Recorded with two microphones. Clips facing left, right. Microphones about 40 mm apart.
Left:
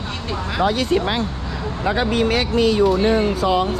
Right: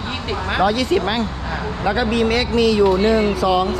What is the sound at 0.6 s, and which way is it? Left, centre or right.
Speech, right.